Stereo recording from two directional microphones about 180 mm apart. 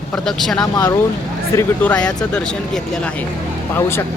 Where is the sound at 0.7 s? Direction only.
20° left (ahead or behind); by 3.1 s 5° left (ahead or behind).